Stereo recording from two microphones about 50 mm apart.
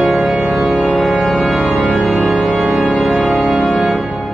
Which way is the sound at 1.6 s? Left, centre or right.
Centre.